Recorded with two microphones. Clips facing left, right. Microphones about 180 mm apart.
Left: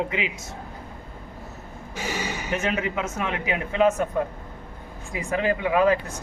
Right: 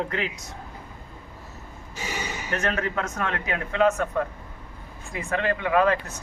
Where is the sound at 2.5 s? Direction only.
10° left (ahead or behind).